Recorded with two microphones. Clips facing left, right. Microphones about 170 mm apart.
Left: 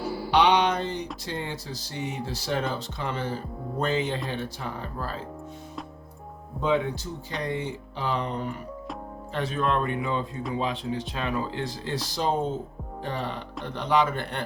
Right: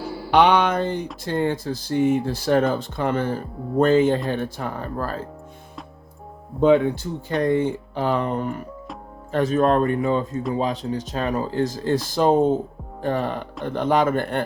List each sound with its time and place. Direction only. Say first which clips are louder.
0.3 s speech: right 4 dB; 50° right (ahead or behind)
6.6 s speech: right 9 dB; 55° right (ahead or behind)